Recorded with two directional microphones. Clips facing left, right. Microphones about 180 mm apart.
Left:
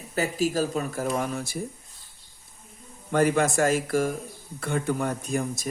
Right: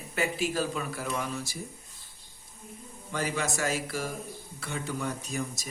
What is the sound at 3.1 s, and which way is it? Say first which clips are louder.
Speech: left 10 dB; 55° left (ahead or behind).